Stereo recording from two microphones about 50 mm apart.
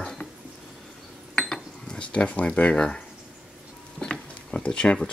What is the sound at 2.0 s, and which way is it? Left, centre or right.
Speech, left.